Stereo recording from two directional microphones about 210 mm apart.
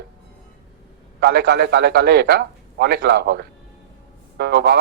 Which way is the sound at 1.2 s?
50° right (ahead or behind).